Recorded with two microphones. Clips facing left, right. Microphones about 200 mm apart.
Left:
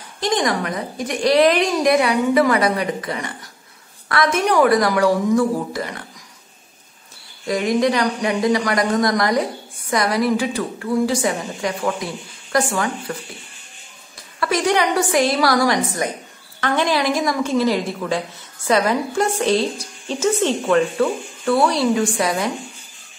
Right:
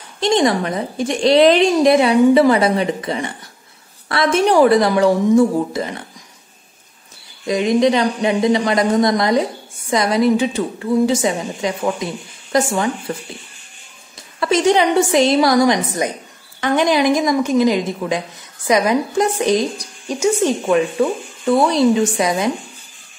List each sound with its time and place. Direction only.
0.2 s speech: 25° right (ahead or behind)
7.4 s speech: 20° right (ahead or behind)
14.4 s speech: 25° right (ahead or behind)